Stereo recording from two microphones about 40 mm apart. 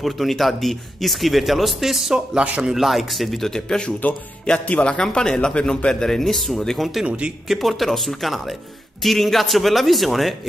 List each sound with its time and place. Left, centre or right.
0.0 s a man's voice: centre
3.5 s speech: centre
6.8 s a man's voice: centre
7.1 s speech: right
7.4 s a man's voice: centre